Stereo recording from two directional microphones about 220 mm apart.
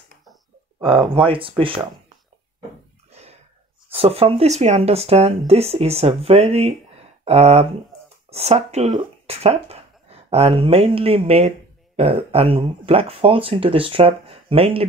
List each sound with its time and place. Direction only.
0.7 s speech: 20° right (ahead or behind)
3.1 s sneeze: 30° right (ahead or behind)
3.9 s speech: 25° right (ahead or behind)